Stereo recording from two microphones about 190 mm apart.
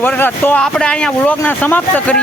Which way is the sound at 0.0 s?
10° left (ahead or behind).